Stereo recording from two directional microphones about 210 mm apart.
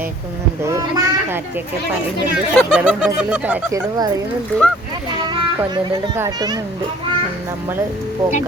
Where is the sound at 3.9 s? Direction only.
20° right (ahead or behind).